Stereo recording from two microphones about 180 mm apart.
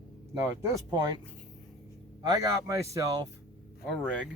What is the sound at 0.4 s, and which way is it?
Speech, 20° right (ahead or behind).